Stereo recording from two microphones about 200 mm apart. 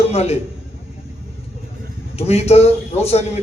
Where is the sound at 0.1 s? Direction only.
30° left (ahead or behind).